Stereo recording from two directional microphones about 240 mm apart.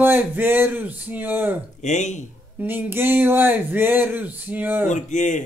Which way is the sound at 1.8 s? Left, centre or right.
Left.